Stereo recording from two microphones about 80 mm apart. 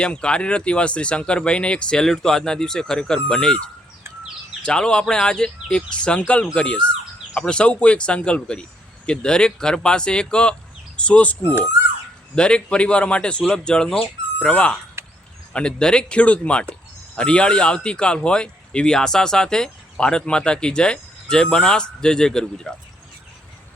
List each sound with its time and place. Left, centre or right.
0.0 s speech: centre
4.6 s speech: centre
12.4 s speech: centre
15.0 s a sound: right
15.5 s speech: centre